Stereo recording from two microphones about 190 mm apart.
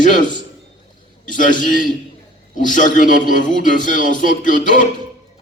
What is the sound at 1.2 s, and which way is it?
A man's voice, 45° left (ahead or behind).